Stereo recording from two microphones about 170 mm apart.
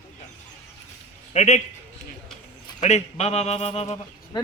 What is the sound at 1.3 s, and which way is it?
Speech, 40° left (ahead or behind).